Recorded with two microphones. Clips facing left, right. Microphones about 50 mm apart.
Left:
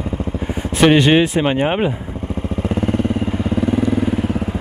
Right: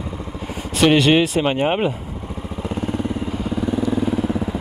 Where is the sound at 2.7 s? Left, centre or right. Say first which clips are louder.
Left 5 dB; left.